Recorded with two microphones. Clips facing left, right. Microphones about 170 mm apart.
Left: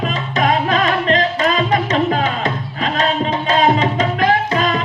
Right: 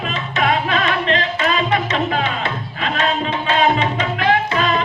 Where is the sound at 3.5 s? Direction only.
40° left (ahead or behind).